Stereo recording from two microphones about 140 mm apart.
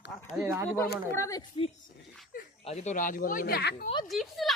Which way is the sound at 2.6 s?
55° left (ahead or behind).